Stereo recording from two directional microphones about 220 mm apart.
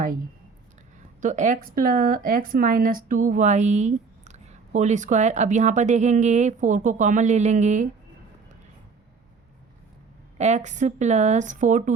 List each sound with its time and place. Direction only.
1.2 s speech: 35° right (ahead or behind)
10.3 s speech: 30° right (ahead or behind)